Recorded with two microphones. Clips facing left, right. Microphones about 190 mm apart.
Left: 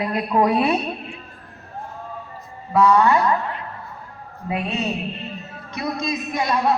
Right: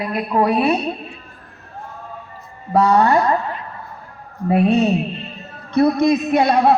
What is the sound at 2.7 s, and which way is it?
Speech, 40° right (ahead or behind).